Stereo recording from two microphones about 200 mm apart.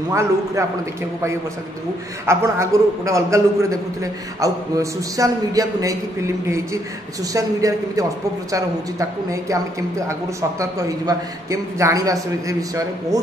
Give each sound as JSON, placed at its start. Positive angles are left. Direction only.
{"t": 0.1, "sound": "a man's voice", "side_deg": -15}
{"t": 2.2, "sound": "a man's voice", "side_deg": -15}